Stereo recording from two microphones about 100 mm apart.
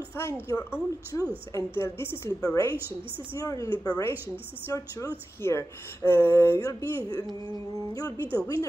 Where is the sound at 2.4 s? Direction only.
35° left (ahead or behind).